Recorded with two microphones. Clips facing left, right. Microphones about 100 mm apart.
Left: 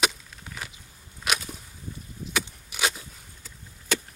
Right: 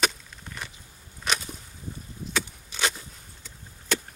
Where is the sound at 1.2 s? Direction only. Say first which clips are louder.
Even; 5° left (ahead or behind).